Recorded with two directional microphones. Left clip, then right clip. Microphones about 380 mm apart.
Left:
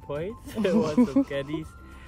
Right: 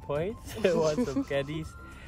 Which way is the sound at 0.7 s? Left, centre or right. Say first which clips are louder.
Left 5 dB; centre.